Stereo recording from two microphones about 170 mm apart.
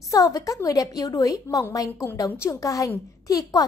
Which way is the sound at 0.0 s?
20° left (ahead or behind).